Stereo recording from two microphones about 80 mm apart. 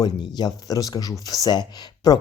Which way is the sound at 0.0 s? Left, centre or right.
Left.